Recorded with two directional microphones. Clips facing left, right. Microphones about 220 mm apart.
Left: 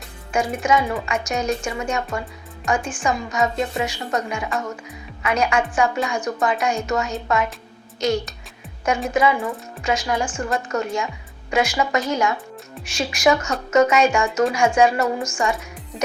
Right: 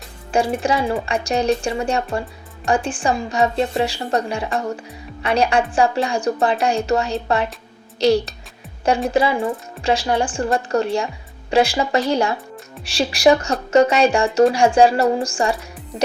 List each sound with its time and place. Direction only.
0.3 s a woman's voice: 30° right (ahead or behind)